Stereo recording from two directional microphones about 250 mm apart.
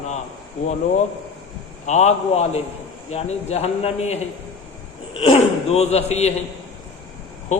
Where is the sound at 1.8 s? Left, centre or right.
Left.